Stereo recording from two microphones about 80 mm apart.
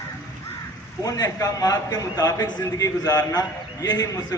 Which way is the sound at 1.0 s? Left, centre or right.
Left.